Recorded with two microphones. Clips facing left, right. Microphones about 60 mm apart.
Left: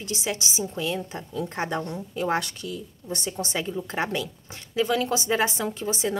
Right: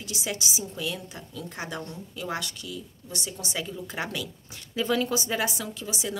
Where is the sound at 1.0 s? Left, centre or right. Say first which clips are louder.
Left 7 dB; left.